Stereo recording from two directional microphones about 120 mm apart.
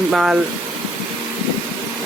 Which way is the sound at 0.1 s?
5° right (ahead or behind).